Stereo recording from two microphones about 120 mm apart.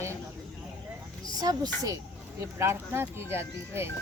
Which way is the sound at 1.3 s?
35° right (ahead or behind).